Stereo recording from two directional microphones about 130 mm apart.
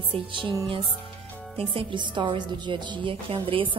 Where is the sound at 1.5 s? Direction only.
40° right (ahead or behind).